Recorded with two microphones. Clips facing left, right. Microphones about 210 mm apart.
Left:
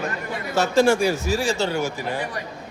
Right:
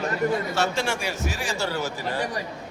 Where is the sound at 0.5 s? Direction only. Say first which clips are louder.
Left 8 dB; 40° left (ahead or behind).